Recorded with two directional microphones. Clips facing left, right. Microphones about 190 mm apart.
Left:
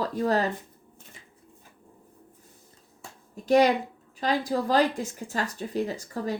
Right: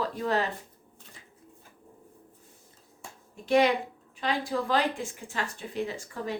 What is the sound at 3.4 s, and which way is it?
Speech, 40° left (ahead or behind).